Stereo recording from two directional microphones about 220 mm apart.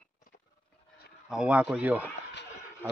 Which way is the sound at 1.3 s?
5° right (ahead or behind).